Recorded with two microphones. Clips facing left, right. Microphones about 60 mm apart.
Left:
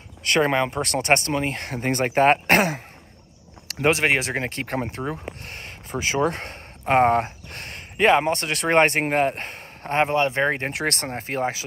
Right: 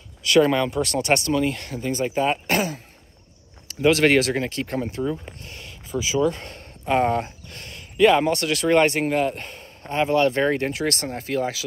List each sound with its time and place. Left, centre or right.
0.2 s speech: left
3.9 s speech: left
10.1 s speech: left
10.7 s speech: left